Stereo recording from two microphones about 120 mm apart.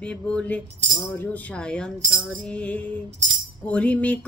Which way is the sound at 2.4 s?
10° left (ahead or behind).